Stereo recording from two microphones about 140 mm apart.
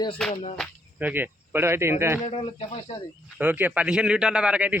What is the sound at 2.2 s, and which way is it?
Speech, 45° left (ahead or behind).